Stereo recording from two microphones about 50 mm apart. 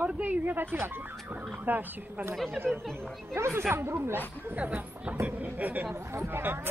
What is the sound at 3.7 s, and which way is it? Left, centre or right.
Speech, right.